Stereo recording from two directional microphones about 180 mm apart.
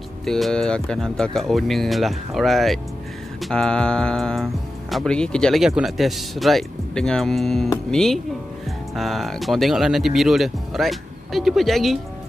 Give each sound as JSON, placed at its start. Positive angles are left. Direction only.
{"t": 0.2, "sound": "speech", "side_deg": 0}